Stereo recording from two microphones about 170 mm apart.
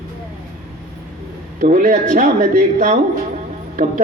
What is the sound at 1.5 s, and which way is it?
A man's voice, 50° right (ahead or behind).